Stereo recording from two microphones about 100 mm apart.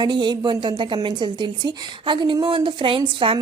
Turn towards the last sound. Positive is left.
turn(degrees=-60)  # may be behind; listen again after turning